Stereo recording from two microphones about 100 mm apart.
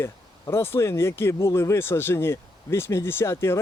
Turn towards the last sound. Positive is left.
turn(degrees=25)  # may be behind; listen again after turning